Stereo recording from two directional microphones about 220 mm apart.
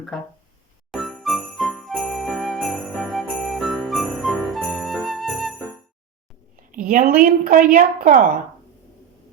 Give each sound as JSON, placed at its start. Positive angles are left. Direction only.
{"t": 0.1, "sound": "a sound", "side_deg": 0}
{"t": 0.9, "sound": "jingle bell", "side_deg": 0}
{"t": 6.7, "sound": "a woman's voice", "side_deg": -40}